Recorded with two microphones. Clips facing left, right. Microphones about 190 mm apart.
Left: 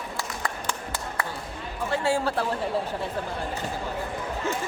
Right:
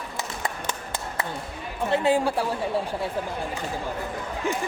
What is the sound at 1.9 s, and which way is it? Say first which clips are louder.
Speech: right 3 dB; 20° right (ahead or behind).